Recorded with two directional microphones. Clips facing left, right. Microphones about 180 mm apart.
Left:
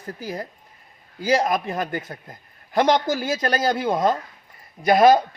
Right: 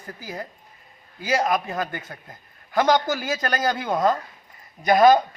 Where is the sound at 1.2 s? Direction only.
35° left (ahead or behind).